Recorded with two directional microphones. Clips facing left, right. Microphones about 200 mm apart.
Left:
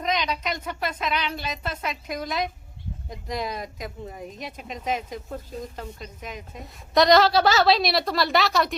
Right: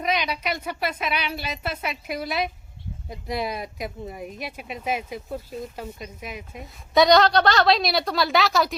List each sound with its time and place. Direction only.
0.0 s speech: 10° right (ahead or behind)